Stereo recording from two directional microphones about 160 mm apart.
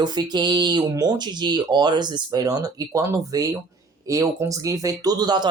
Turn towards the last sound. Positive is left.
turn(degrees=-25)  # may be behind; listen again after turning